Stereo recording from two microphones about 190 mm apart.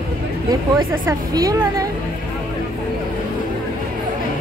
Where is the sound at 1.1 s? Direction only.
20° right (ahead or behind).